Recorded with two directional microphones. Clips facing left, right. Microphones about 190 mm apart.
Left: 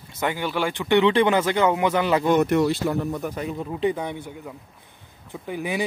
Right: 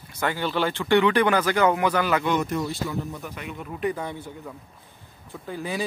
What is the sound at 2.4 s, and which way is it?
Speech, 70° left (ahead or behind).